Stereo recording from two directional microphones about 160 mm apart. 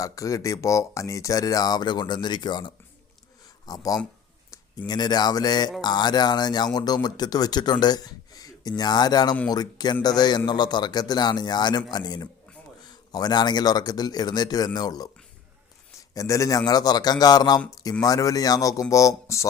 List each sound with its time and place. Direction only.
0.0 s speech: 20° left (ahead or behind)
16.1 s speech: 20° left (ahead or behind)